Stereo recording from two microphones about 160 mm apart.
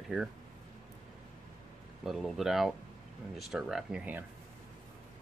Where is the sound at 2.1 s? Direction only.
Centre (ahead or behind).